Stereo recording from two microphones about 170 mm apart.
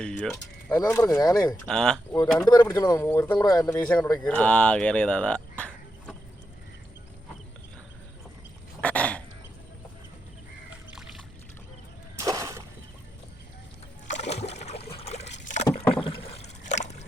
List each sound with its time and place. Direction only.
0.0 s a sound: 5° left (ahead or behind)
0.7 s speech: 15° left (ahead or behind)
1.6 s speech: 5° left (ahead or behind)
2.4 s speech: 20° left (ahead or behind)
8.8 s throat clearing: 10° left (ahead or behind)
12.2 s a sound: 20° right (ahead or behind)
14.1 s a sound: 40° left (ahead or behind)
14.9 s boat: 40° left (ahead or behind)
15.9 s rowboat: 30° left (ahead or behind)